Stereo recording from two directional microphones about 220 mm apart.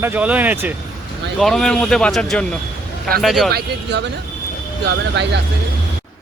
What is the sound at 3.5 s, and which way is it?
Speech, 50° right (ahead or behind).